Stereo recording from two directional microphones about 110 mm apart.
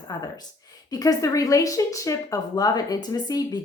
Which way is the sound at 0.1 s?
35° left (ahead or behind).